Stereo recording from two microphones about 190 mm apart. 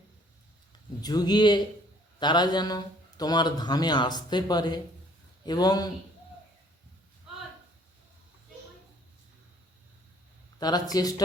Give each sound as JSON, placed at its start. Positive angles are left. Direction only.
{"t": 1.0, "sound": "a man's voice", "side_deg": 20}
{"t": 7.3, "sound": "a sound", "side_deg": -5}
{"t": 10.6, "sound": "a man's voice", "side_deg": 20}